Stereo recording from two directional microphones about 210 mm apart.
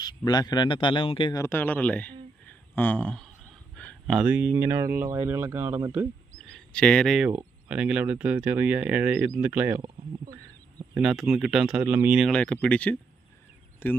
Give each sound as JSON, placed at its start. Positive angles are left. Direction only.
{"t": 0.0, "sound": "a man's voice", "side_deg": 20}
{"t": 1.4, "sound": "speech", "side_deg": 10}
{"t": 6.5, "sound": "speech", "side_deg": 5}
{"t": 10.9, "sound": "speech", "side_deg": 0}